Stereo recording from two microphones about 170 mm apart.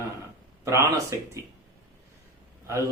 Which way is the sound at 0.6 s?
15° right (ahead or behind).